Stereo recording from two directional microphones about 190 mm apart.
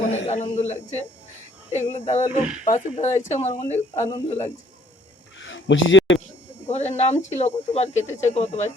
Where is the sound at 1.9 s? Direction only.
40° left (ahead or behind).